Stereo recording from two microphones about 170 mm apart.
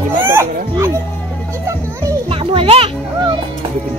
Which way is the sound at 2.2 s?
30° right (ahead or behind).